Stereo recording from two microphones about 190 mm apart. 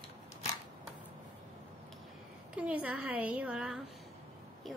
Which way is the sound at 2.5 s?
5° right (ahead or behind).